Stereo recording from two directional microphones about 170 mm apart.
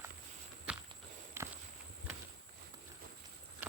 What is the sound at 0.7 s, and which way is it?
Walk, 10° right (ahead or behind).